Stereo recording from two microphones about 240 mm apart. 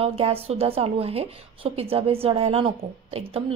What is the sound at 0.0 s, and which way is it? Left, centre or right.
Speech, right.